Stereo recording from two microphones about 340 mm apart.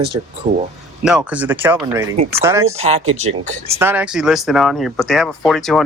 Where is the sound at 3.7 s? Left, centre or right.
Centre.